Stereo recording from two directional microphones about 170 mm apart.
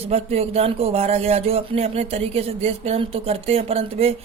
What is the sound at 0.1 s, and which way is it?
Mantra, 40° right (ahead or behind).